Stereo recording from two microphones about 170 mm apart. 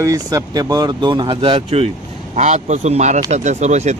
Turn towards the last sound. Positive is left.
turn(degrees=-40)  # may be behind; listen again after turning